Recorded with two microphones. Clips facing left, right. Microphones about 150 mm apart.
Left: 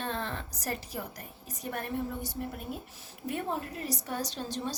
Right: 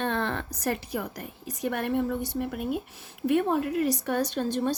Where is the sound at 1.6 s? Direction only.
80° right.